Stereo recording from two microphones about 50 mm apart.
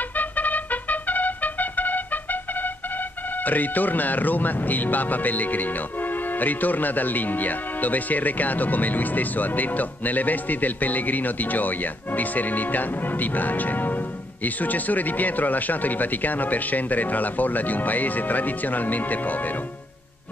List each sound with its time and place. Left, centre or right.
0.1 s trumpet: left
3.4 s speech: left